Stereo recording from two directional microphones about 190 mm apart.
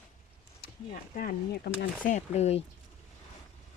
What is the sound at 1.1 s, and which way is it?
Speech, 45° left (ahead or behind).